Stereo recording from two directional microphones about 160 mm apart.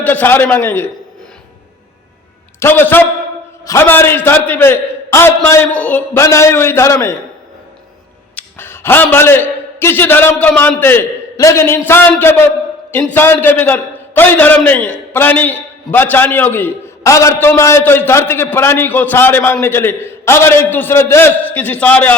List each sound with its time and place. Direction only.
0.0 s a man's voice: 10° left (ahead or behind)
2.6 s a man's voice: 15° left (ahead or behind)
8.4 s a man's voice: 15° left (ahead or behind)
13.1 s a man's voice: 15° left (ahead or behind)